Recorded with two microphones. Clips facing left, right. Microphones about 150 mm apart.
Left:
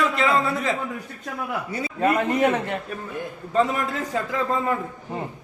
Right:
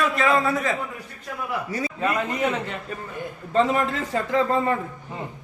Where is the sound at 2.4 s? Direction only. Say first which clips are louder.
Left 4 dB; 50° left (ahead or behind).